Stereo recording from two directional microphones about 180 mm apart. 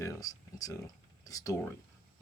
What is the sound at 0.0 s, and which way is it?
Speech, 20° left (ahead or behind).